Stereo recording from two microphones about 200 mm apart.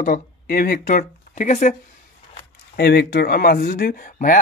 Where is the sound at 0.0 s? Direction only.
45° left (ahead or behind).